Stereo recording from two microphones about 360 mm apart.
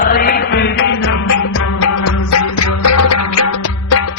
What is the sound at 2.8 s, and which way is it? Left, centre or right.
Music, left.